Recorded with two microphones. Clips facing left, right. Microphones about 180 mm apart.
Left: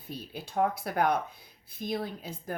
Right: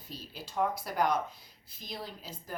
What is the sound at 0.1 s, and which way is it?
A woman's voice, 55° left (ahead or behind).